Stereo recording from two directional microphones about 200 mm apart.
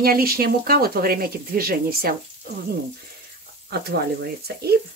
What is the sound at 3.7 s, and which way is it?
Speech, 50° right (ahead or behind).